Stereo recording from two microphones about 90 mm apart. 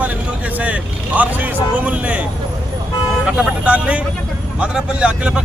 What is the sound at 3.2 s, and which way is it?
Speech, 10° right (ahead or behind).